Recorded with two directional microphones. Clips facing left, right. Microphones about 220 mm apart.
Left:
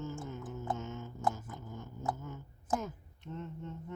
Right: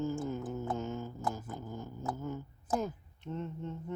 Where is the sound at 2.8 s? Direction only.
30° right (ahead or behind).